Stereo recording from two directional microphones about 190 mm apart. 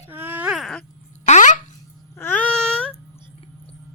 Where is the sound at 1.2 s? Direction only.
40° left (ahead or behind).